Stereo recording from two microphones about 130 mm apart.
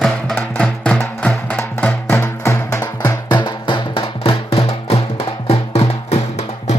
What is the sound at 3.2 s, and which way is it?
Music, 35° left (ahead or behind).